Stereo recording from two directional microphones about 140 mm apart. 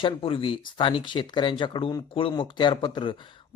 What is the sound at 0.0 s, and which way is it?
Speech, 40° left (ahead or behind).